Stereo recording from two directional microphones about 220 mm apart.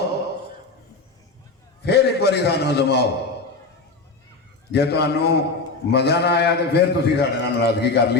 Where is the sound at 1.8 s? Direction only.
50° left (ahead or behind).